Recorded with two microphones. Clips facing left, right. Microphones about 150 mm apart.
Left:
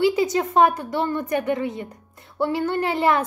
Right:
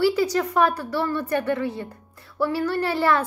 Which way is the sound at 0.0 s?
20° left (ahead or behind).